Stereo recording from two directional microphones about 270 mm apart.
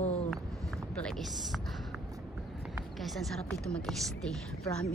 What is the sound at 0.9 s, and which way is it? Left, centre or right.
Speech, centre.